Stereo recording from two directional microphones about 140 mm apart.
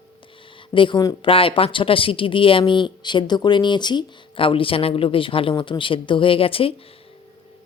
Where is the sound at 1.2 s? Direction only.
40° left (ahead or behind).